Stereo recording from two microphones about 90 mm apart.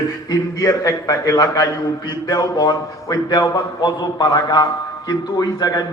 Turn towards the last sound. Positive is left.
turn(degrees=45)  # may be behind; listen again after turning